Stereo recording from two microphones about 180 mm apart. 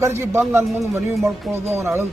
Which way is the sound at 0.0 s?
15° right (ahead or behind).